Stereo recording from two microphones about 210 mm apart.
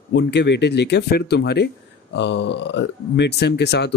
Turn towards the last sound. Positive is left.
turn(degrees=55)  # may be behind; listen again after turning